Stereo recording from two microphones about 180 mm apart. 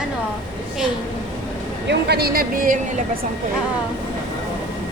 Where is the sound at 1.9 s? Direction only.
65° right (ahead or behind); by 2.8 s 50° right (ahead or behind).